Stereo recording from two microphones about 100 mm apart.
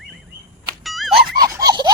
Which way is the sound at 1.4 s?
40° right (ahead or behind).